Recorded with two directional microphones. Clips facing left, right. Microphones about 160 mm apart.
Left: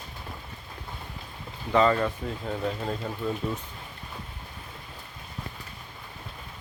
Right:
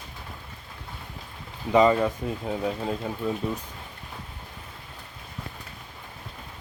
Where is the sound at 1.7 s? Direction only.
15° right (ahead or behind).